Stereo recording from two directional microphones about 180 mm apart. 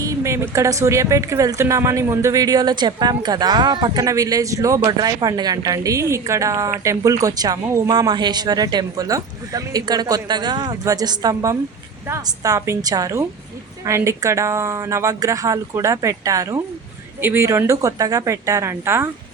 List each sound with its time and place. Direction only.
0.0 s a woman's voice: 15° right (ahead or behind)